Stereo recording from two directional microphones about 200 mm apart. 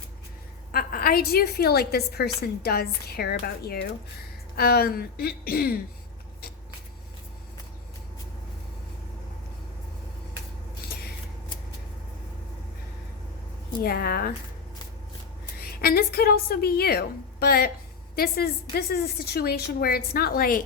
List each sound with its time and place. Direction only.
0.7 s a woman's voice: 45° left (ahead or behind)
13.8 s a woman's voice: 50° left (ahead or behind)
15.5 s a woman's voice: 50° left (ahead or behind)